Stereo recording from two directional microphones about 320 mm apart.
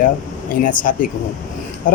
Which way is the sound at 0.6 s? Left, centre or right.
Left.